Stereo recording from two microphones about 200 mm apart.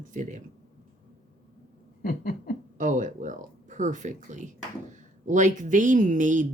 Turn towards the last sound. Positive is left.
turn(degrees=-40)  # may be behind; listen again after turning